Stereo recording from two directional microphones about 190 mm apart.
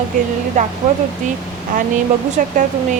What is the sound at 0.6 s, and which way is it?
Speech, 40° right (ahead or behind).